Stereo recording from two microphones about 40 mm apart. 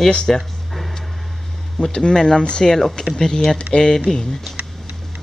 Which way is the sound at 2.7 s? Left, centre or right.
Centre.